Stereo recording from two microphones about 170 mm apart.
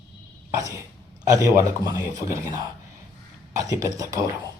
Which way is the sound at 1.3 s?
20° right (ahead or behind).